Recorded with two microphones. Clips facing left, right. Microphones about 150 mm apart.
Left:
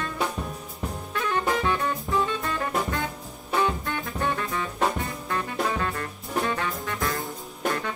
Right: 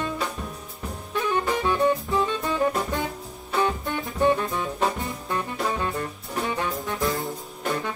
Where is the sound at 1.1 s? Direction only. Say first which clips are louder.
Right 1 dB; 15° right (ahead or behind).